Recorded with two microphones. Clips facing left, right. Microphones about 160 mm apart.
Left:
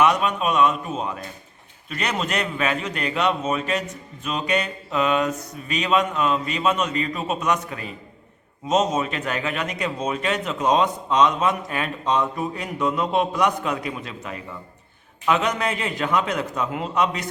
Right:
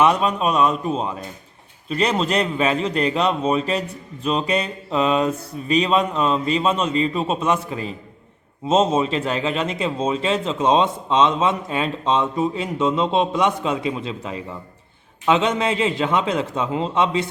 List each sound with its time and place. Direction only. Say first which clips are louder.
0.0 s a man's voice: right 2 dB; 30° right (ahead or behind)